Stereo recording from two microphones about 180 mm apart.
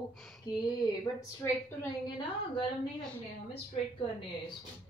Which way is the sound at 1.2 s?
15° left (ahead or behind).